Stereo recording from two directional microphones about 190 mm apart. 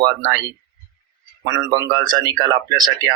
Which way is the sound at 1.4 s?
20° right (ahead or behind).